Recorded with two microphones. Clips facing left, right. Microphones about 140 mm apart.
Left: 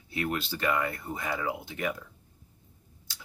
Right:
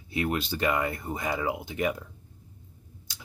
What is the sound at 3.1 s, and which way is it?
Tick-tock, 15° right (ahead or behind).